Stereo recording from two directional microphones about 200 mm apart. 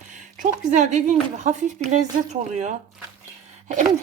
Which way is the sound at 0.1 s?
40° right (ahead or behind).